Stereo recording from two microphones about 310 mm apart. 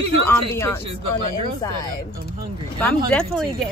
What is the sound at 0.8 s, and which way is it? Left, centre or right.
Speech, right.